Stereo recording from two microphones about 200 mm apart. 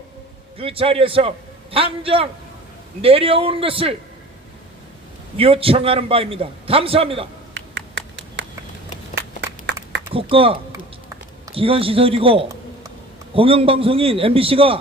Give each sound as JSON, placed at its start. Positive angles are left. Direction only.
{"t": 0.6, "sound": "a man's voice", "side_deg": -30}
{"t": 5.4, "sound": "a man's voice", "side_deg": -25}
{"t": 7.5, "sound": "a sound", "side_deg": -60}
{"t": 10.3, "sound": "a man's voice", "side_deg": -25}